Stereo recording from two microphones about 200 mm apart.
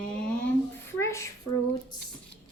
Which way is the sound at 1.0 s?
15° left (ahead or behind).